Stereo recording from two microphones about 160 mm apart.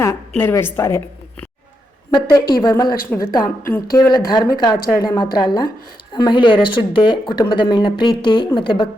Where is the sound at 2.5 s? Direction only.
25° left (ahead or behind).